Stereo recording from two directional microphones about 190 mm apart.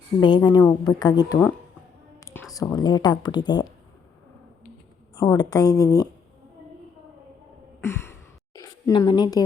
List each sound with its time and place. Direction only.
0.2 s speech: 20° left (ahead or behind)
2.2 s a sound: 10° left (ahead or behind)
2.6 s speech: 20° left (ahead or behind)
5.1 s speech: 15° left (ahead or behind)
7.8 s sigh: 15° left (ahead or behind)
8.5 s speech: 20° left (ahead or behind)